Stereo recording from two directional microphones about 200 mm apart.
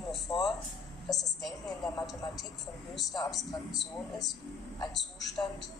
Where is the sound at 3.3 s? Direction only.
Centre (ahead or behind).